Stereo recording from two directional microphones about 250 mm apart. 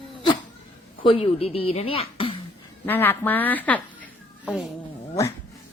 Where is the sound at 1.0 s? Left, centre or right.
Left.